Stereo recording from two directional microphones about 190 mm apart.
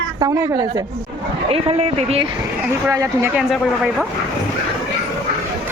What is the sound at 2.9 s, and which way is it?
Speech, 15° right (ahead or behind).